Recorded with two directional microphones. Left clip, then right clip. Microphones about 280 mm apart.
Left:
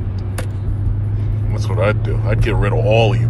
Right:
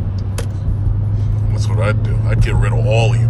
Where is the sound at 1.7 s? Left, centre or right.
Centre.